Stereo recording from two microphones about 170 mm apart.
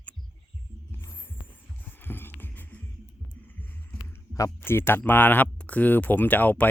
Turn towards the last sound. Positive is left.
turn(degrees=10)  # may be behind; listen again after turning